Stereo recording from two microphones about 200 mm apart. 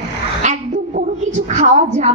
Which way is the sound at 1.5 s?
35° right (ahead or behind).